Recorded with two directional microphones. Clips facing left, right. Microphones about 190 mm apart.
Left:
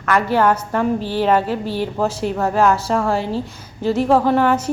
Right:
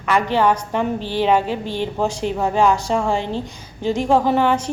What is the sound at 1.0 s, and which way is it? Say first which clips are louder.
Speech: left 1 dB; 40° left (ahead or behind).